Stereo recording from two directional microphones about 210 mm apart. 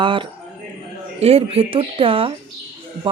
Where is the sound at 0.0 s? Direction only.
25° right (ahead or behind).